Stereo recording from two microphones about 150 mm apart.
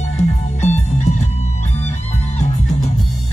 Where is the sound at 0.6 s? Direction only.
50° left (ahead or behind).